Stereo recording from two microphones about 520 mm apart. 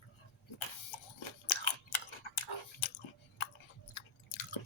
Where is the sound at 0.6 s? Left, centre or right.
Left.